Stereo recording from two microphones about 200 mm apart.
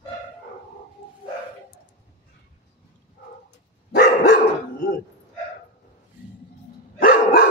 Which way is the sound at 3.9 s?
55° left (ahead or behind).